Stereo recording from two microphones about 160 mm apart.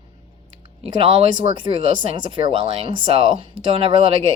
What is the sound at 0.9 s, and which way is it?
Speech, 35° right (ahead or behind).